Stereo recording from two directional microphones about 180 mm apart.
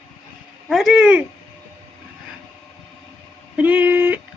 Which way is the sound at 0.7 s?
Centre (ahead or behind).